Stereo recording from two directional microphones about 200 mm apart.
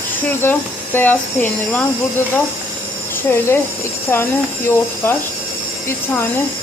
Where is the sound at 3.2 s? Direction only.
10° left (ahead or behind).